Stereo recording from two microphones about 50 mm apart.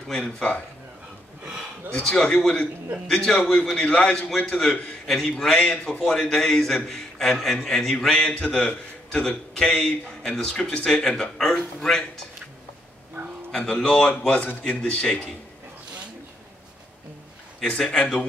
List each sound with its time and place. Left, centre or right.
0.1 s a man's voice: centre
1.9 s a man's voice: centre
3.8 s a man's voice: centre
5.0 s a man's voice: centre
9.2 s a man's voice: centre
13.5 s a man's voice: centre
17.6 s a man's voice: centre